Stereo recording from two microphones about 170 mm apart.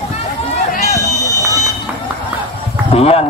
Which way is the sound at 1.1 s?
20° right (ahead or behind).